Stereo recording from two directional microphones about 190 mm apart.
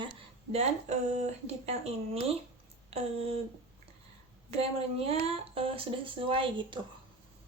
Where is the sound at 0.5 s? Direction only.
35° right (ahead or behind).